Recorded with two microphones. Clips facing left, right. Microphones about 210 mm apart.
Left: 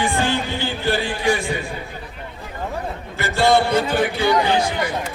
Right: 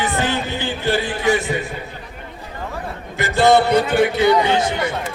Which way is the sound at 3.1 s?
15° right (ahead or behind).